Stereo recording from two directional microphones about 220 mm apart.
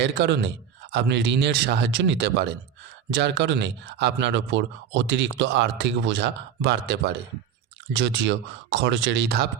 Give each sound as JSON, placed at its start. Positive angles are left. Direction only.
{"t": 0.0, "sound": "speech", "side_deg": -50}